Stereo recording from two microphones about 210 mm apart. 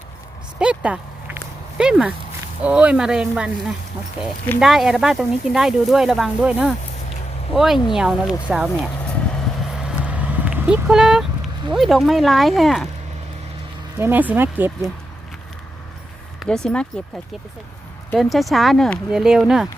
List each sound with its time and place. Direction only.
0.6 s a sound: 5° right (ahead or behind)
1.8 s speech: 5° right (ahead or behind)
10.1 s vehicle: 5° right (ahead or behind)
11.7 s speech: centre (ahead or behind)
14.0 s speech: 10° right (ahead or behind)
16.4 s speech: 5° left (ahead or behind)
18.1 s speech: centre (ahead or behind)